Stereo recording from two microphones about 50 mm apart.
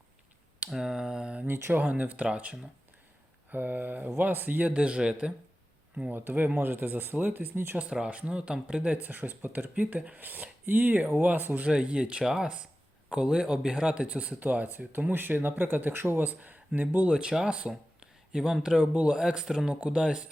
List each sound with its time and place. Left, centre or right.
0.7 s a sound: centre
1.5 s speech: right
1.8 s speech: right
3.5 s speech: right
6.1 s speech: right
7.9 s speech: right
9.0 s speech: right
11.6 s speech: right
16.0 s speech: right
16.2 s speech: right
17.1 s speech: centre